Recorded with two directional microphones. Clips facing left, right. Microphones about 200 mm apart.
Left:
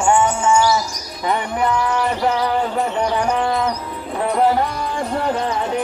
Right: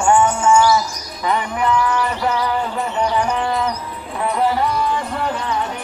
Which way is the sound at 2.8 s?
55° left (ahead or behind).